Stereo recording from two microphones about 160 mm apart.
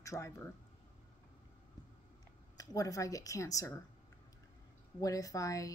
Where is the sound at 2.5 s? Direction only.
20° left (ahead or behind).